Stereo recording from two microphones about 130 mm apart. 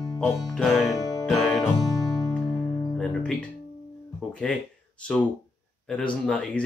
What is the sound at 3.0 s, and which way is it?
Speech, 5° left (ahead or behind).